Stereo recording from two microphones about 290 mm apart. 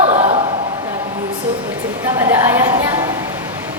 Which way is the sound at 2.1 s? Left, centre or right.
Centre.